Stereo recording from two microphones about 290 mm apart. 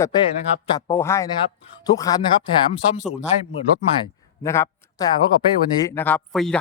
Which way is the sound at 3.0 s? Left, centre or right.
Centre.